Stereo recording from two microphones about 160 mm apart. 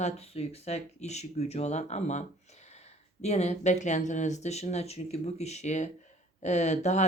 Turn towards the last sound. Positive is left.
turn(degrees=45)  # may be behind; listen again after turning